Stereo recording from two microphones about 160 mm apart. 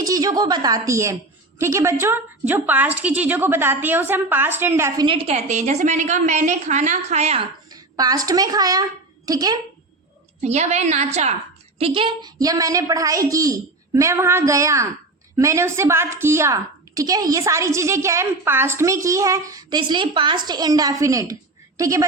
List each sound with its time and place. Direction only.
0.0 s a woman's voice: 25° right (ahead or behind)
5.0 s a woman's voice: 35° right (ahead or behind)
7.7 s a woman's voice: 25° right (ahead or behind)
10.4 s a woman's voice: 45° right (ahead or behind)
11.8 s a woman's voice: 35° right (ahead or behind)